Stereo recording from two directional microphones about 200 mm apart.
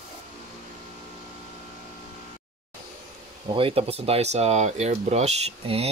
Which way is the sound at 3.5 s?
25° right (ahead or behind).